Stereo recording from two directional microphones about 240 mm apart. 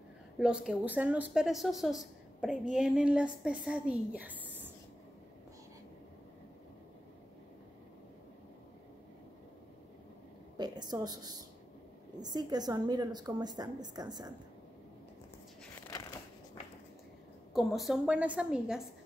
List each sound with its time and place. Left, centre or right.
0.4 s speech: centre
10.6 s a woman's voice: centre
17.6 s speech: centre